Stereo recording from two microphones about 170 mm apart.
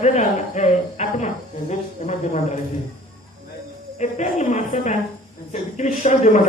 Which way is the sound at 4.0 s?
45° left (ahead or behind).